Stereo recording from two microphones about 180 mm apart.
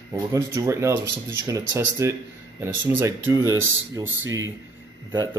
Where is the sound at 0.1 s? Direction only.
15° right (ahead or behind).